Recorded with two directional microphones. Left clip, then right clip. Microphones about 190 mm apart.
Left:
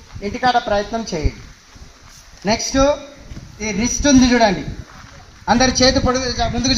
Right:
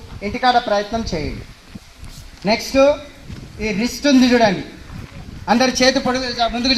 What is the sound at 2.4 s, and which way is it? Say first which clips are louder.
Speech: right 2 dB; 40° right (ahead or behind).